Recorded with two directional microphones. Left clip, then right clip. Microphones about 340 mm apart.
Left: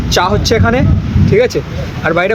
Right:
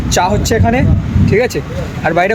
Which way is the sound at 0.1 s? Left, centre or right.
Centre.